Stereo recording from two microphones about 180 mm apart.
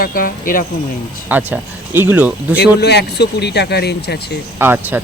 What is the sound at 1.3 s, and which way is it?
Speech, 10° right (ahead or behind).